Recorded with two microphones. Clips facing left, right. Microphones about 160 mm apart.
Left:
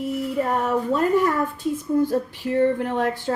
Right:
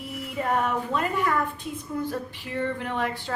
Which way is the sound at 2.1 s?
45° left (ahead or behind).